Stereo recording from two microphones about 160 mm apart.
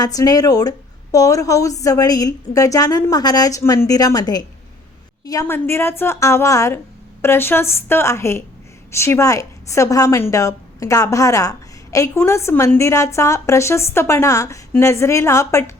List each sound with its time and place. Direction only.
0.0 s a woman's voice: 25° left (ahead or behind)